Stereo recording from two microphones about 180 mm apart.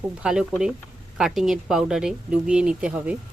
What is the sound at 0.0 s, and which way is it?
Speech, 5° right (ahead or behind).